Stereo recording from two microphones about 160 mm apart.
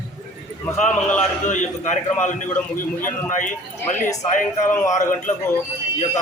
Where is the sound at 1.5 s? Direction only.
50° left (ahead or behind).